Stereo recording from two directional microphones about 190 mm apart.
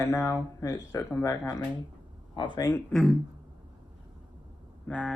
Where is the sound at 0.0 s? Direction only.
15° left (ahead or behind).